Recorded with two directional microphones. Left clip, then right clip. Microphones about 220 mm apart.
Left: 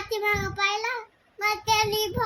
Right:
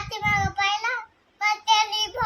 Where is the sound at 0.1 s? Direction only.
15° right (ahead or behind).